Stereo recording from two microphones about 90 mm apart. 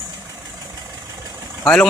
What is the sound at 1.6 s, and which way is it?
Speech, 10° left (ahead or behind).